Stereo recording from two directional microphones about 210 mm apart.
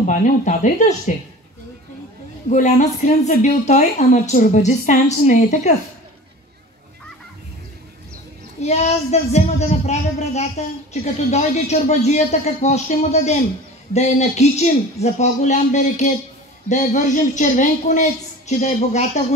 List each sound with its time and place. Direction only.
0.0 s speech: 35° left (ahead or behind)
2.5 s speech: 35° left (ahead or behind)
8.5 s speech: 30° left (ahead or behind)